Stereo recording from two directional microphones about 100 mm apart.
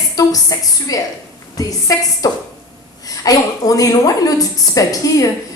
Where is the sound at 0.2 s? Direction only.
40° left (ahead or behind).